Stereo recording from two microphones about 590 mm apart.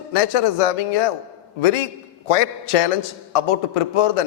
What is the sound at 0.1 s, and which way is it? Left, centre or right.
Speech, left.